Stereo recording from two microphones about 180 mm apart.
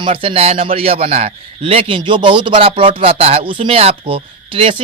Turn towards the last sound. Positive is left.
turn(degrees=-30)  # may be behind; listen again after turning